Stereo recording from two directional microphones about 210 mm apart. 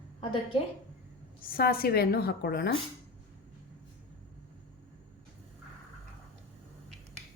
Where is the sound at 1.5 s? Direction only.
45° left (ahead or behind).